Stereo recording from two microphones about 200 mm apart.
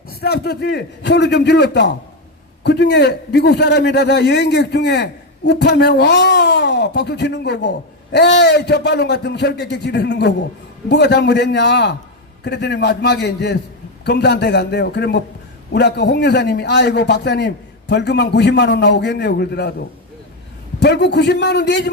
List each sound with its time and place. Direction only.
0.1 s a man's voice: 50° left (ahead or behind)
20.7 s a man's voice: 60° left (ahead or behind)